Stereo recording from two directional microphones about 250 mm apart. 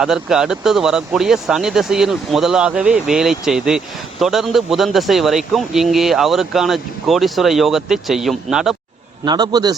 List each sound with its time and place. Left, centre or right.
0.0 s speech: centre
9.2 s a man's voice: centre